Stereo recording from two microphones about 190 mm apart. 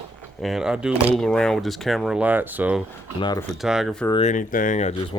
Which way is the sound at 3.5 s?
Centre (ahead or behind).